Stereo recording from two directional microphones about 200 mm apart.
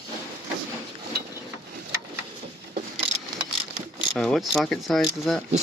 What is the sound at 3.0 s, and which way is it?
Vehicle, 20° left (ahead or behind).